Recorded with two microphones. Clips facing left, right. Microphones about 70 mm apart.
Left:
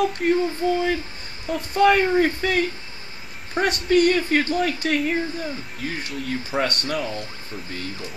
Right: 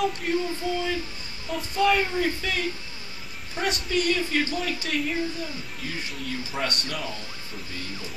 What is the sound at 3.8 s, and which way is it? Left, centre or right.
Speech, left.